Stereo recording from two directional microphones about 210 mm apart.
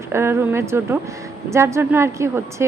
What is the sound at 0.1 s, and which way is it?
A woman's voice, 10° right (ahead or behind).